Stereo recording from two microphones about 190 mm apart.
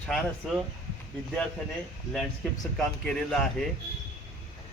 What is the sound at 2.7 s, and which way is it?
Speech, 5° left (ahead or behind).